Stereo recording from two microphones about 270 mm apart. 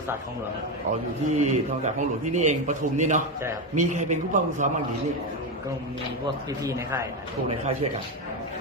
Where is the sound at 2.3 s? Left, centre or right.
Right.